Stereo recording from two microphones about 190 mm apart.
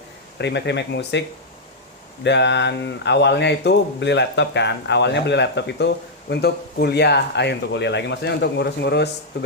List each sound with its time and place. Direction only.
0.3 s speech: 65° left (ahead or behind)
2.2 s speech: 65° left (ahead or behind)